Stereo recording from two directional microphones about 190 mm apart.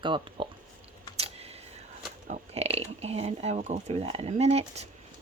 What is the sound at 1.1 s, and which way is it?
Computer keyboard, 30° right (ahead or behind).